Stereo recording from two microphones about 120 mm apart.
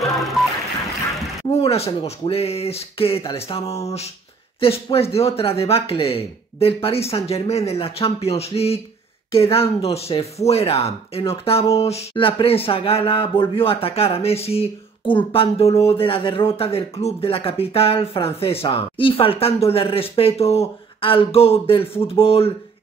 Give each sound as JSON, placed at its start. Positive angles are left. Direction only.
{"t": 1.5, "sound": "speech", "side_deg": 55}